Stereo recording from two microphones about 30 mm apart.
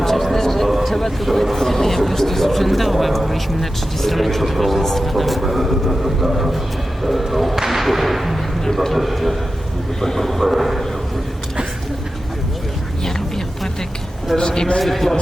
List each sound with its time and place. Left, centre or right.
0.0 s a sound: centre
0.7 s speech: centre
7.0 s music: centre
7.6 s whip: centre
8.6 s speech: centre
10.5 s speech: centre
13.1 s a sound: centre
14.3 s a man's voice: left
14.8 s speech: centre